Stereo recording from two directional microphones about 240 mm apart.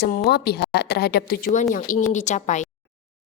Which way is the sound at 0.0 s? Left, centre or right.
Left.